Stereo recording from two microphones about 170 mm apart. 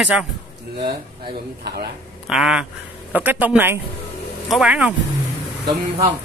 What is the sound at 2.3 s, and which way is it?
A man's voice, 5° right (ahead or behind).